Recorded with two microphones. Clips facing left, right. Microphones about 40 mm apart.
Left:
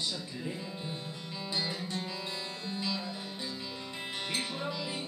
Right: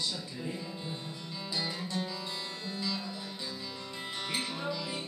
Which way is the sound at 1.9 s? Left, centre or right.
Left.